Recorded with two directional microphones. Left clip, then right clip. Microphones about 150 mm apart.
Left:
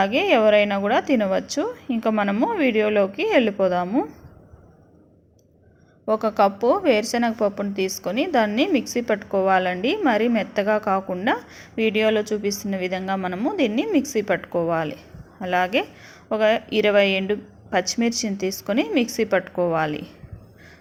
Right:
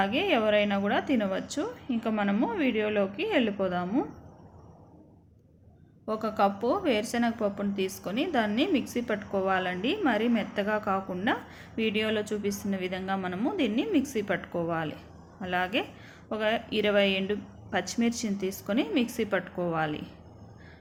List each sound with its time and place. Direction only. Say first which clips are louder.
0.0 s a woman's voice: left 8 dB; 40° left (ahead or behind)
6.1 s a woman's voice: left 8 dB; 40° left (ahead or behind)